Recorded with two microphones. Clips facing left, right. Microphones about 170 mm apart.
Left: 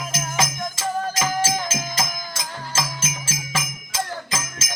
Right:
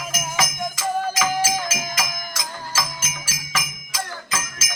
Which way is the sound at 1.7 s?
30° left (ahead or behind).